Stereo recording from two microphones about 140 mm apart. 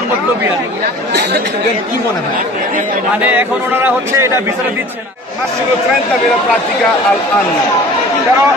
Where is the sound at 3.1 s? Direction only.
10° right (ahead or behind).